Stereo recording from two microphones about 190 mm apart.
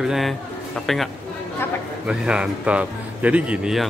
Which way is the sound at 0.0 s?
Centre (ahead or behind).